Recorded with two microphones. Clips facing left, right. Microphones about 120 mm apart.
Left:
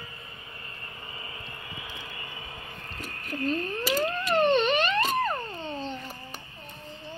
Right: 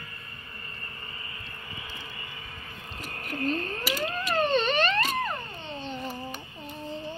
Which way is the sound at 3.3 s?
40° right (ahead or behind).